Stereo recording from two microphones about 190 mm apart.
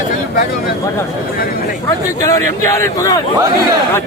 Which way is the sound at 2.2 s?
15° left (ahead or behind).